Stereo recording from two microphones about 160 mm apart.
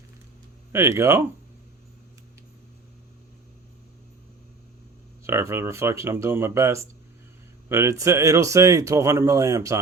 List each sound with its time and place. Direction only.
0.7 s speech: 15° right (ahead or behind)
5.2 s speech: 15° right (ahead or behind)